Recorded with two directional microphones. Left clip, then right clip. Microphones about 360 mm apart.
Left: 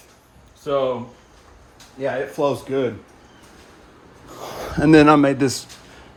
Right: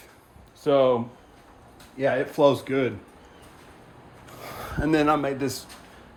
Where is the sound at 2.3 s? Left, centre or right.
Centre.